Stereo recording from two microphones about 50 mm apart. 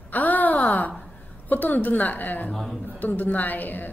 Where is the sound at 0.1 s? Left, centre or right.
Left.